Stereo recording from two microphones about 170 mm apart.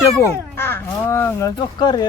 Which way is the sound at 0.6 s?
15° left (ahead or behind).